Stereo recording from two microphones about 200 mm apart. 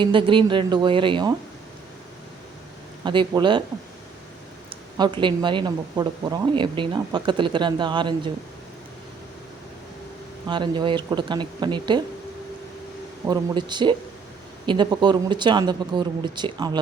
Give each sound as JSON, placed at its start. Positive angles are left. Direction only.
{"t": 0.0, "sound": "speech", "side_deg": -25}
{"t": 3.0, "sound": "speech", "side_deg": -25}
{"t": 4.7, "sound": "speech", "side_deg": -20}
{"t": 10.4, "sound": "speech", "side_deg": -20}
{"t": 13.2, "sound": "speech", "side_deg": -20}